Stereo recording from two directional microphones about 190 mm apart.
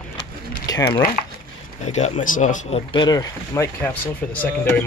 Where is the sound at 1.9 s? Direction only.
35° left (ahead or behind).